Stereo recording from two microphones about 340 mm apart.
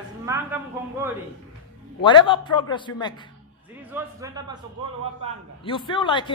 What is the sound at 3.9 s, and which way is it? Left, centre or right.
Speech, centre.